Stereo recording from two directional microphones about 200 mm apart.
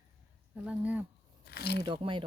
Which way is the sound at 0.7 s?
5° right (ahead or behind).